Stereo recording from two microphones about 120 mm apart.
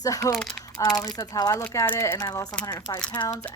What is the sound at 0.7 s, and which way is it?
Speech, 30° left (ahead or behind).